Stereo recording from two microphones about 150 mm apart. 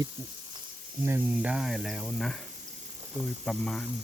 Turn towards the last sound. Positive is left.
turn(degrees=5)  # may be behind; listen again after turning